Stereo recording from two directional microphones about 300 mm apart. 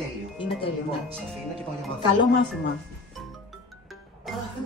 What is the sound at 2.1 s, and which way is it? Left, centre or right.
Speech, left.